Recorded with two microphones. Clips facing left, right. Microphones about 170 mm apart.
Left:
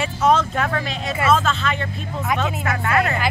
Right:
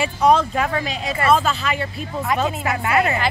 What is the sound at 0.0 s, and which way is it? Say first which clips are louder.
Vehicle: right 2 dB; 10° right (ahead or behind).